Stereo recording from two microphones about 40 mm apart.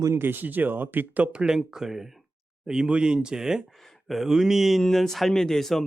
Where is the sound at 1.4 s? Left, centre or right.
Centre.